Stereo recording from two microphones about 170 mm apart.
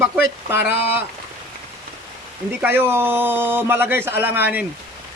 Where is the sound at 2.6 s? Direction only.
10° right (ahead or behind).